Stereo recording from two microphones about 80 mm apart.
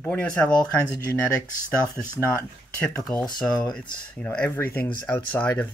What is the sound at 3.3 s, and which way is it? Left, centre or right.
Speech, left.